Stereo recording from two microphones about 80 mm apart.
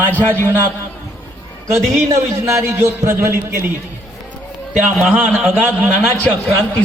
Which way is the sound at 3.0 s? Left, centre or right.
Right.